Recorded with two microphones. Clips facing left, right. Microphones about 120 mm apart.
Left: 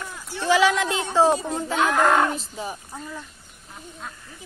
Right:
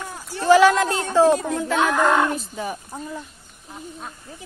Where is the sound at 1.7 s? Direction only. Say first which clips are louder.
Right 2 dB; 35° right (ahead or behind).